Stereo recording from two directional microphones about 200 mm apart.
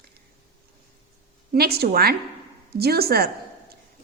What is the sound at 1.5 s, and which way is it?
A woman's voice, 50° right (ahead or behind).